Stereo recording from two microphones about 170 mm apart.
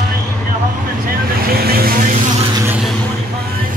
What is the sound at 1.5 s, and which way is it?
Vehicle, 65° right (ahead or behind).